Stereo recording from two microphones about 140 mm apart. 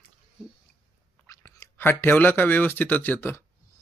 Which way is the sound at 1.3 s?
25° left (ahead or behind).